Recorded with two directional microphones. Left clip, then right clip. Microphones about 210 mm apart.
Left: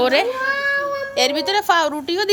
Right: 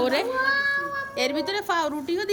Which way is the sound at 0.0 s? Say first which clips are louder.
Left 6 dB; 5° right (ahead or behind).